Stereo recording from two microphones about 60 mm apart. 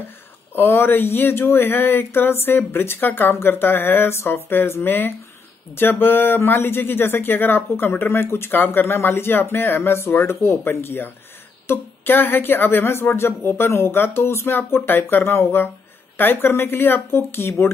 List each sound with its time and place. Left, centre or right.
0.6 s speech: left